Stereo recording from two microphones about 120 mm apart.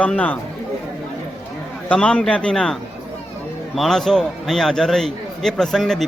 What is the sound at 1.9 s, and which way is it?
Speech, 10° left (ahead or behind).